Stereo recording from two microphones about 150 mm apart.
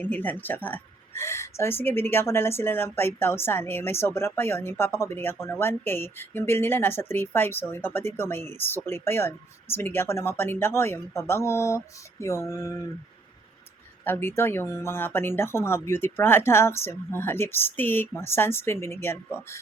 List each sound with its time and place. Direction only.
0.0 s a woman's voice: 10° left (ahead or behind)
14.0 s a woman's voice: 15° left (ahead or behind)